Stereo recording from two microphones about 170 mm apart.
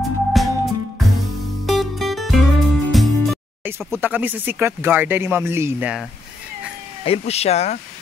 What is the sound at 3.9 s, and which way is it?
Speech, 10° right (ahead or behind).